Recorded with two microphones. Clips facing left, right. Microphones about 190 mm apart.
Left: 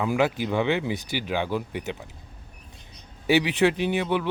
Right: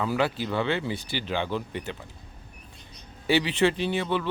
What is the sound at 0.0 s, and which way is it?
A man's voice, 15° left (ahead or behind).